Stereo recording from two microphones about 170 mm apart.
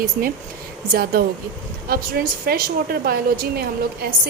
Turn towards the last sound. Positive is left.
turn(degrees=-65)  # may be behind; listen again after turning